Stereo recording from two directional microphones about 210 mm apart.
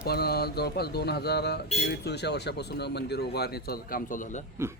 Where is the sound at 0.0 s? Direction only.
50° left (ahead or behind).